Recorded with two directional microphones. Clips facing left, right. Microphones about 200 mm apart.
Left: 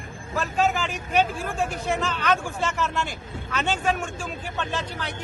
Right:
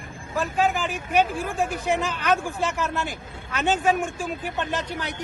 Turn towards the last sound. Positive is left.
turn(degrees=-15)  # may be behind; listen again after turning